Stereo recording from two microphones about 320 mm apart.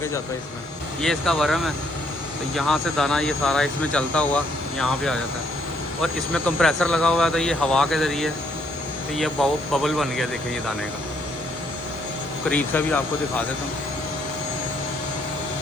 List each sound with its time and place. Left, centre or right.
1.0 s speech: centre
12.5 s speech: centre